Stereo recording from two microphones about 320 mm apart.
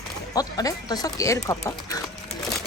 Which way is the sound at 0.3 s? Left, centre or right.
Centre.